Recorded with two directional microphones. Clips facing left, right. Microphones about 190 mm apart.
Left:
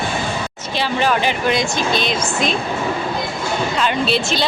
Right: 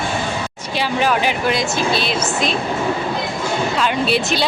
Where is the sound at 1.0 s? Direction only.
5° right (ahead or behind).